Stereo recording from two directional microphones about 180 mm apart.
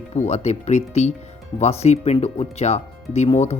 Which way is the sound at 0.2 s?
40° left (ahead or behind).